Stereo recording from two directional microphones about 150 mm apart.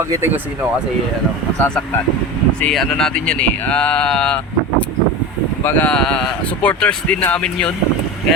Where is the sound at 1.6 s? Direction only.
10° left (ahead or behind).